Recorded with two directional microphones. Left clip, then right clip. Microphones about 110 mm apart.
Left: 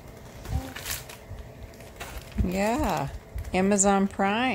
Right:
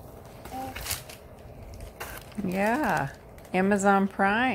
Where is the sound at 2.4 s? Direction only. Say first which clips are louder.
Even; 10° left (ahead or behind).